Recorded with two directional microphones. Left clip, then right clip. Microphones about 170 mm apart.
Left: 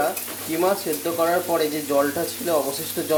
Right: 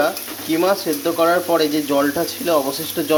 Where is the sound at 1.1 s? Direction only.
Centre (ahead or behind).